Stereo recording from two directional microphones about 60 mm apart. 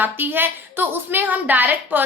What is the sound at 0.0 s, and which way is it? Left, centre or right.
A woman's voice, right.